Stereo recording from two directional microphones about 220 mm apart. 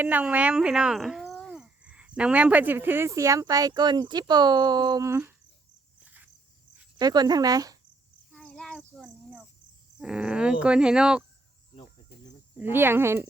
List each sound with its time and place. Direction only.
0.0 s speech: 5° right (ahead or behind)
6.1 s cricket: 5° right (ahead or behind)
7.0 s speech: 15° right (ahead or behind)
8.3 s a sound: 5° left (ahead or behind)
10.0 s speech: 5° right (ahead or behind)
12.5 s speech: 10° right (ahead or behind)